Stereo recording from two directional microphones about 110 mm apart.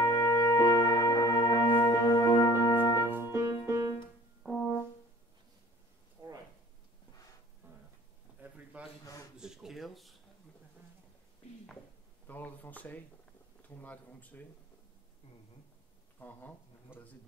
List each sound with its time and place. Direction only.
0.0 s music: 30° left (ahead or behind)
3.1 s music: 20° right (ahead or behind)
4.4 s brass instrument: centre (ahead or behind)
7.6 s a sound: 20° right (ahead or behind); by 10.1 s centre (ahead or behind)
12.3 s speech: 15° left (ahead or behind)
16.2 s speech: 15° left (ahead or behind)